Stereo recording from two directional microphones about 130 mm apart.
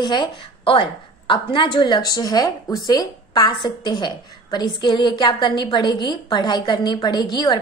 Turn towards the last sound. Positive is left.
turn(degrees=35)  # may be behind; listen again after turning